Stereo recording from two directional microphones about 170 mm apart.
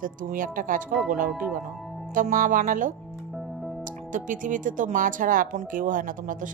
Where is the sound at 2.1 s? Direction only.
50° right (ahead or behind).